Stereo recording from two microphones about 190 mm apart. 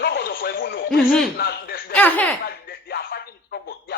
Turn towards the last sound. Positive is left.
turn(degrees=55)  # may be behind; listen again after turning